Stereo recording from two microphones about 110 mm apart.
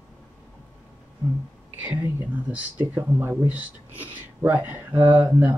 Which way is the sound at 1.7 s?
15° right (ahead or behind).